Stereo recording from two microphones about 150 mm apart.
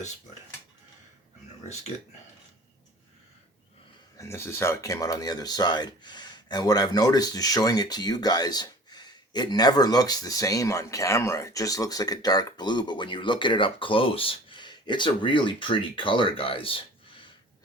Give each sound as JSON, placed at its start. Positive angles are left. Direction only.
{"t": 4.2, "sound": "speech", "side_deg": 15}